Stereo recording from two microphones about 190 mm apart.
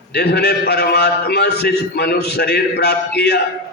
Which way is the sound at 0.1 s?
60° left (ahead or behind).